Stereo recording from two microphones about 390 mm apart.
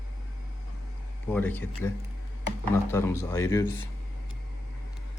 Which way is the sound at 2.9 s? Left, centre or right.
Centre.